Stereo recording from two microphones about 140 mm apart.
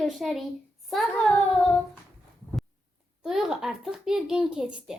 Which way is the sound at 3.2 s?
5° right (ahead or behind).